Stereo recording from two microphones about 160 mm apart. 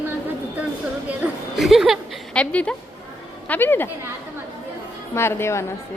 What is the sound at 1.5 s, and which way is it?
A woman's voice, centre (ahead or behind).